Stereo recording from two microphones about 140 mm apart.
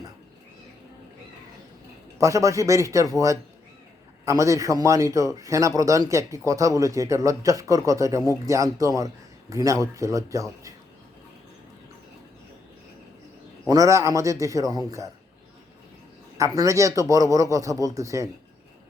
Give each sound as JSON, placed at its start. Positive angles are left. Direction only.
{"t": 2.1, "sound": "speech", "side_deg": -20}
{"t": 13.7, "sound": "speech", "side_deg": -25}
{"t": 16.6, "sound": "speech", "side_deg": -20}